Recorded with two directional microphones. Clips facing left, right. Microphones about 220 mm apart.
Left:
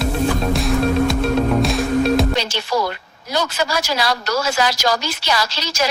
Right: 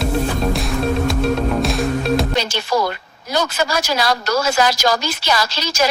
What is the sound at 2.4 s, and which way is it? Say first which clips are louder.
A woman's voice: right 2 dB; 50° right (ahead or behind).